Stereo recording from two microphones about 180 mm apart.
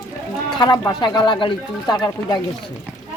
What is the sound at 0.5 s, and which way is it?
Speech, 25° left (ahead or behind).